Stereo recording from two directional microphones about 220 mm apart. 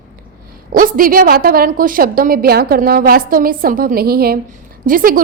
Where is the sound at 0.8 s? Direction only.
40° right (ahead or behind).